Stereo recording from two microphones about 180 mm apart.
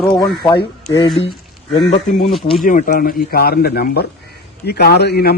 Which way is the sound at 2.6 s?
50° left (ahead or behind).